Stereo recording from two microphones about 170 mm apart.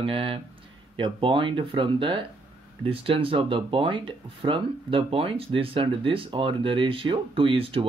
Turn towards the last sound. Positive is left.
turn(degrees=-30)  # may be behind; listen again after turning